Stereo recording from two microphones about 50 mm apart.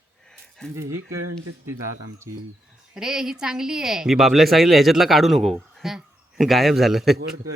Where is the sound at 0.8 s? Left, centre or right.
Right.